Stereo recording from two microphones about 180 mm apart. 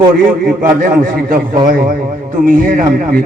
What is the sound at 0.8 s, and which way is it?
A man's voice, 55° right (ahead or behind).